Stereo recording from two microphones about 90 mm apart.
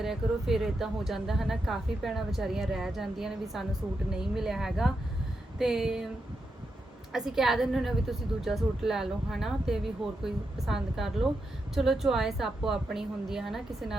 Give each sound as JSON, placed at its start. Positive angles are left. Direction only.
{"t": 0.0, "sound": "a woman's voice", "side_deg": -5}
{"t": 7.1, "sound": "a woman's voice", "side_deg": -5}